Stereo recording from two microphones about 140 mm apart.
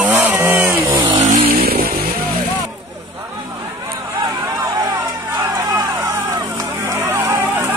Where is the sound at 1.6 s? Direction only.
90° right.